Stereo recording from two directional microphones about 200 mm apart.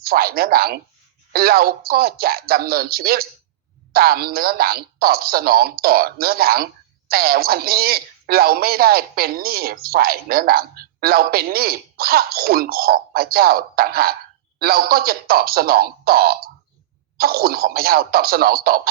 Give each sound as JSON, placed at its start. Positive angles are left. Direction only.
{"t": 0.0, "sound": "a woman's voice", "side_deg": -50}